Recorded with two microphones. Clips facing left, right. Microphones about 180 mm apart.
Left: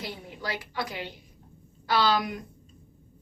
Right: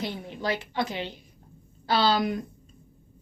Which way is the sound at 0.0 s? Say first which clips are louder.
Right 5 dB; 25° right (ahead or behind).